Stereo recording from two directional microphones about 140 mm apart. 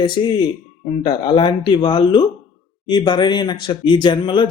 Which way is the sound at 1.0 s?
35° left (ahead or behind).